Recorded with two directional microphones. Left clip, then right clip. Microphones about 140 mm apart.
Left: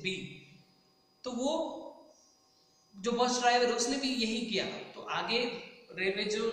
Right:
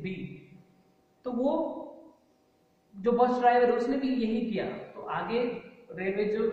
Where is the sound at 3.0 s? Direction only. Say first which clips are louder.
Right 5 dB; 10° right (ahead or behind).